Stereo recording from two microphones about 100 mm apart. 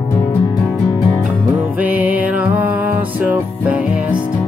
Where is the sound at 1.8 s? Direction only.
15° right (ahead or behind).